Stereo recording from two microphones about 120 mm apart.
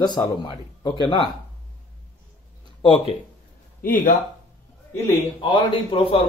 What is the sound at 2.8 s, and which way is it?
Speech, 50° left (ahead or behind).